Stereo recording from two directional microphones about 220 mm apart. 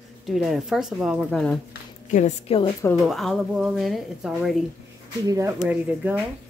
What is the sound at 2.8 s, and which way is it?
Speech, 5° left (ahead or behind).